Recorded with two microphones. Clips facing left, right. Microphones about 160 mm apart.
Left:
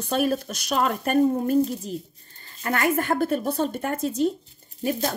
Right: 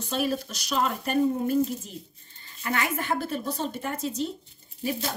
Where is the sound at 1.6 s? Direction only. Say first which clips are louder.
Left 3 dB; 35° left (ahead or behind).